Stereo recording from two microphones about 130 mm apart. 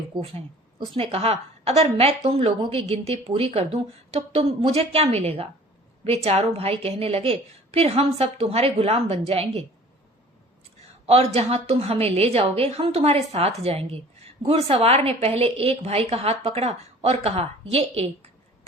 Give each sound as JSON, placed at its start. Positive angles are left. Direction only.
{"t": 0.9, "sound": "a woman's voice", "side_deg": -50}
{"t": 11.0, "sound": "a woman's voice", "side_deg": -50}